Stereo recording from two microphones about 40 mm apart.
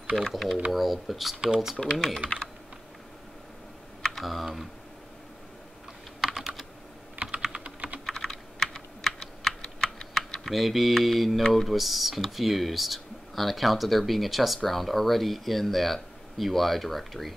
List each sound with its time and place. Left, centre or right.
0.3 s speech: centre
2.2 s speech: left
4.2 s speech: centre
6.2 s computer keyboard: centre
7.2 s computer keyboard: right
7.4 s typing: right
8.1 s computer keyboard: centre
11.5 s speech: centre